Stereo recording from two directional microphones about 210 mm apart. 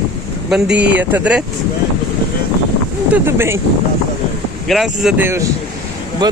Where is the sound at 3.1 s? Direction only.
10° right (ahead or behind).